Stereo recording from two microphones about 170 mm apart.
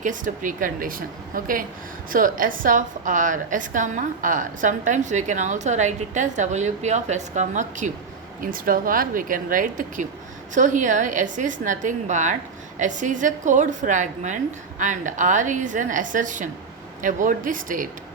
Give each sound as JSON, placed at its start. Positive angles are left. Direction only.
{"t": 0.0, "sound": "a woman's voice", "side_deg": -50}